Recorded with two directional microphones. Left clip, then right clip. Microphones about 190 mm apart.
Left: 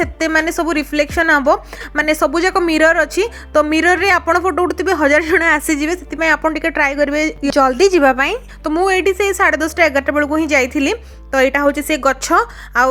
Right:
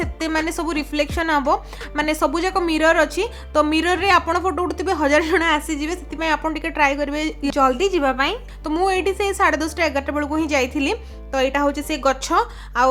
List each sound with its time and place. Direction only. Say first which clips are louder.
0.0 s a woman's voice: left 7 dB; 25° left (ahead or behind)
8.8 s a woman's voice: left 5 dB; 25° left (ahead or behind)